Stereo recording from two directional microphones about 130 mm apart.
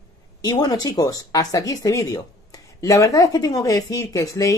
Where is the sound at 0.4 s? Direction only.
30° left (ahead or behind).